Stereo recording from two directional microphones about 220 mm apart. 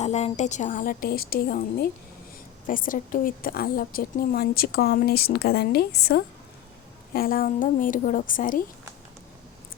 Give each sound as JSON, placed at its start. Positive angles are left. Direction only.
{"t": 0.0, "sound": "a woman's voice", "side_deg": 30}